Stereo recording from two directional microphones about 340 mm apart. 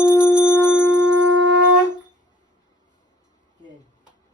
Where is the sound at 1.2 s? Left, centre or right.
Right.